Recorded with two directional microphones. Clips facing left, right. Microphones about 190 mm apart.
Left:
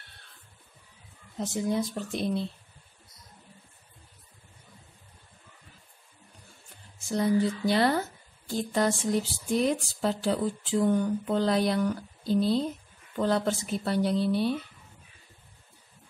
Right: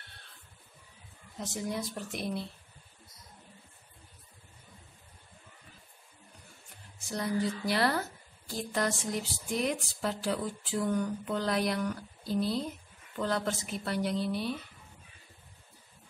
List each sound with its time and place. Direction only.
1.4 s speech: 25° left (ahead or behind)
7.1 s speech: 25° left (ahead or behind)